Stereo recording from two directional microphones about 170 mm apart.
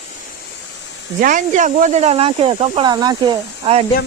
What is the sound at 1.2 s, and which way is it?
Speech, 50° right (ahead or behind).